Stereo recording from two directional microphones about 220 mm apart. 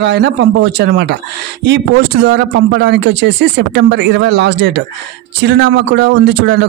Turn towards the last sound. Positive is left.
turn(degrees=-50)  # may be behind; listen again after turning